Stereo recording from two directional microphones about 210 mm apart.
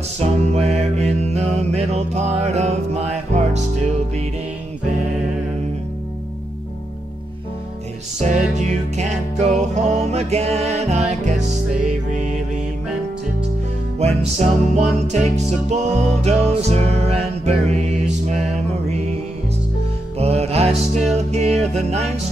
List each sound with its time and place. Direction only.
0.2 s music: 30° right (ahead or behind)
8.2 s music: 35° right (ahead or behind)
13.9 s music: 30° right (ahead or behind)
20.2 s music: 30° right (ahead or behind)